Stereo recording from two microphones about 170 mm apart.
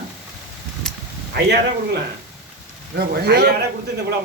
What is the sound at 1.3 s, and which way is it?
A man's voice, 70° right (ahead or behind).